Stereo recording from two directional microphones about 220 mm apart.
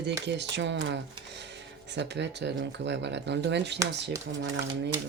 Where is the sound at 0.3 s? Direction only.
50° right (ahead or behind).